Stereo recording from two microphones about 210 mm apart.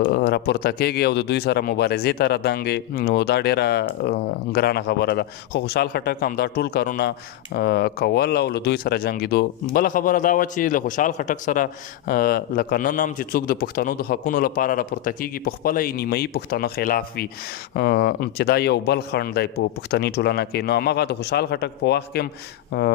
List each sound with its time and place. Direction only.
0.0 s a man's voice: 50° left (ahead or behind)